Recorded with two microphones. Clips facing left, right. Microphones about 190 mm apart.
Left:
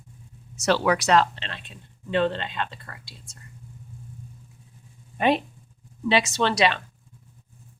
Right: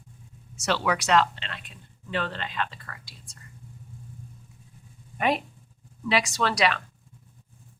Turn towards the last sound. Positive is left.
turn(degrees=25)  # may be behind; listen again after turning